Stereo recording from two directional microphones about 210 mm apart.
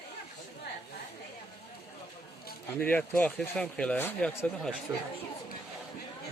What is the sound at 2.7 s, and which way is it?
Speech, 10° left (ahead or behind).